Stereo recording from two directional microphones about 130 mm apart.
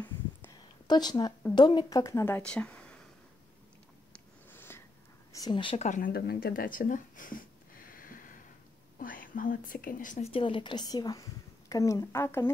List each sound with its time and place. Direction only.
0.8 s a woman's voice: 35° left (ahead or behind); by 3.0 s 10° left (ahead or behind)
4.1 s a sound: 15° left (ahead or behind)
5.3 s a woman's voice: 30° left (ahead or behind)
5.8 s speech: 80° left
7.9 s a sound: 90° left
8.9 s speech: 90° left
10.2 s a woman's voice: 45° left (ahead or behind); by 12.4 s 20° left (ahead or behind)